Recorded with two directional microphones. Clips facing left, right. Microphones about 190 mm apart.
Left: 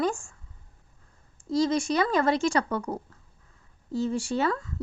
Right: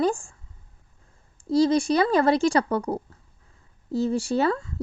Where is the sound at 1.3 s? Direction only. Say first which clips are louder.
Right 5 dB; 35° right (ahead or behind).